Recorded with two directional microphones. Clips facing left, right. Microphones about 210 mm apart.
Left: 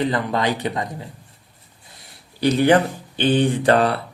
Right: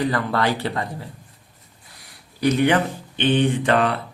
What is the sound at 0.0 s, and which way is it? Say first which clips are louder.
Speech: left 1 dB; 20° left (ahead or behind).